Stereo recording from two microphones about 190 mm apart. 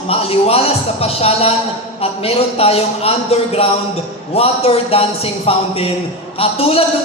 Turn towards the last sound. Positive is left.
turn(degrees=30)  # may be behind; listen again after turning